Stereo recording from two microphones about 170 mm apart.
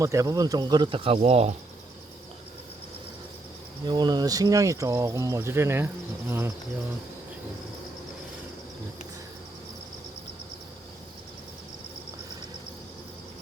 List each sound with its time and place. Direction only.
0.0 s speech: 20° right (ahead or behind); by 1.5 s 35° right (ahead or behind)
3.8 s speech: 25° right (ahead or behind)